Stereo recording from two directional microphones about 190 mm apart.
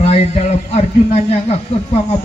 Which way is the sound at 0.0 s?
35° left (ahead or behind).